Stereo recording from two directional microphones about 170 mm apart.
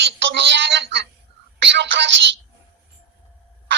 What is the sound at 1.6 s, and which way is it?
Music, 90° right.